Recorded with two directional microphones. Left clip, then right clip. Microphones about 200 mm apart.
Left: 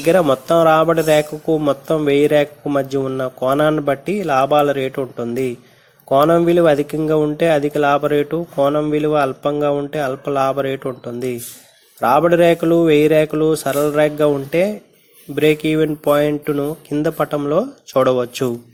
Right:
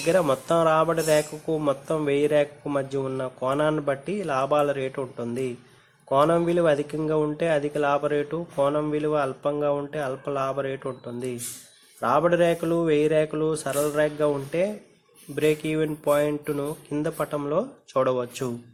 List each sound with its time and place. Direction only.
0.0 s speech: 20° left (ahead or behind)